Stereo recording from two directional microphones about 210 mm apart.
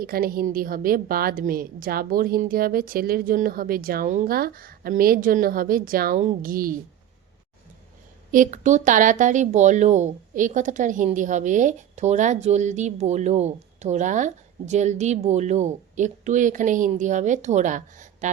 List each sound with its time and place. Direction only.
0.0 s a woman's voice: 45° right (ahead or behind)
8.3 s a woman's voice: 40° right (ahead or behind)